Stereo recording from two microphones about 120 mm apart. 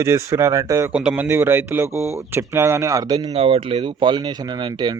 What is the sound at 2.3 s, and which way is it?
Speech, 20° right (ahead or behind).